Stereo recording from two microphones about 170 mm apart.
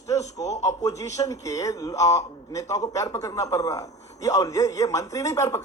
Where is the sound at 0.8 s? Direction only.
20° left (ahead or behind).